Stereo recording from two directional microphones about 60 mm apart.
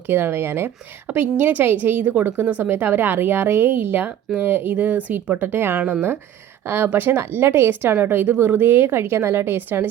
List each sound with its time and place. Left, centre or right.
0.1 s speech: right